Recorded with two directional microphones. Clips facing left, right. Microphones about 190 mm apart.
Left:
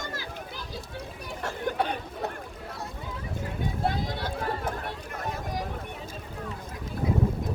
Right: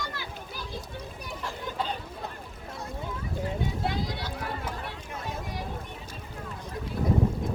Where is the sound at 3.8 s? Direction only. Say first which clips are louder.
Left 2 dB; 50° left (ahead or behind).